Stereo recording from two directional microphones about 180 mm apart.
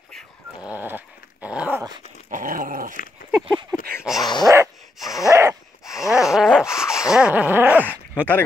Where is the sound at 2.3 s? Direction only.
50° right (ahead or behind).